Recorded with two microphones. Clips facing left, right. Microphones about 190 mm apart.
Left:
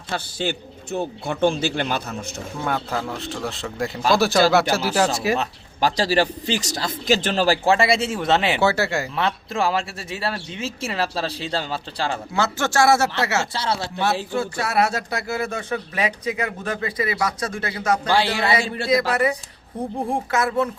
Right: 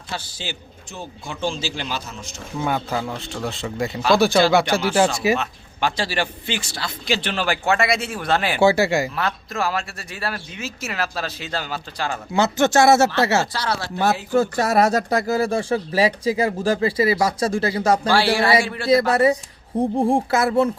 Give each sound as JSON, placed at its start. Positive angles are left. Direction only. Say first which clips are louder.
{"t": 0.1, "sound": "a man's voice", "louder": "left 6 dB", "side_deg": 55}
{"t": 2.6, "sound": "speech", "louder": "right 2 dB", "side_deg": -5}
{"t": 5.4, "sound": "speech", "louder": "left 2 dB", "side_deg": 40}
{"t": 8.6, "sound": "speech", "louder": "right 4 dB", "side_deg": -10}
{"t": 9.1, "sound": "speech", "louder": "left 2 dB", "side_deg": 30}
{"t": 12.3, "sound": "speech", "louder": "right 8 dB", "side_deg": -20}
{"t": 13.4, "sound": "speech", "louder": "even", "side_deg": 25}
{"t": 14.3, "sound": "speech", "louder": "right 8 dB", "side_deg": -40}
{"t": 18.1, "sound": "speech", "louder": "right 2 dB", "side_deg": 20}
{"t": 18.9, "sound": "speech", "louder": "right 4 dB", "side_deg": -30}